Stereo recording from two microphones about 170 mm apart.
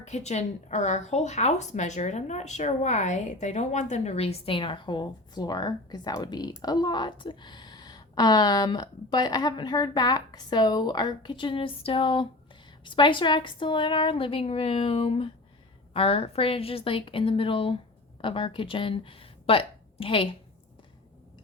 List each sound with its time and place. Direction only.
0.0 s a woman's voice: 40° left (ahead or behind)